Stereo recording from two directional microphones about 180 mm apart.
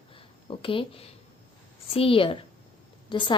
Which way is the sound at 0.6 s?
30° left (ahead or behind).